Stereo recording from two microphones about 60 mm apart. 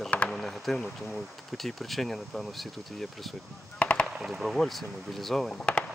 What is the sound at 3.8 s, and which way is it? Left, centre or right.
Machine gun, left.